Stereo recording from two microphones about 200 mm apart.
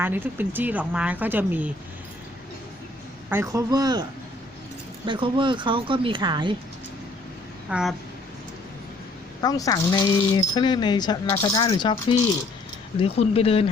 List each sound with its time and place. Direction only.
0.0 s speech: 10° right (ahead or behind)
3.2 s speech: 15° right (ahead or behind)
5.0 s a woman's voice: 25° right (ahead or behind)
7.7 s speech: 5° right (ahead or behind)
9.4 s speech: 20° left (ahead or behind)